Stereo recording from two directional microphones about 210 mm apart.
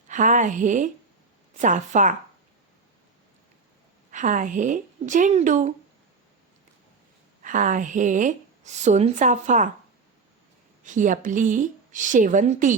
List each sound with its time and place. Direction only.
0.1 s a woman's voice: 35° right (ahead or behind)
4.1 s a woman's voice: 35° right (ahead or behind)
7.4 s a woman's voice: 35° right (ahead or behind)
10.8 s a woman's voice: 35° right (ahead or behind)